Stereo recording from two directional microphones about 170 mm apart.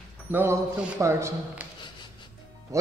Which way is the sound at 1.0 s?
15° right (ahead or behind).